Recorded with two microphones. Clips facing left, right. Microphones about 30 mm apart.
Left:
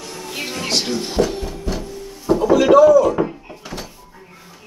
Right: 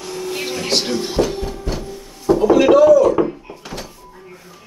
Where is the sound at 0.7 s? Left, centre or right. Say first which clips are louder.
Right 1 dB; right.